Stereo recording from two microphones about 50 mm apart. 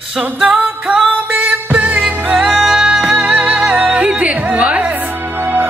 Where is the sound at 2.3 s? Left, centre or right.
Centre.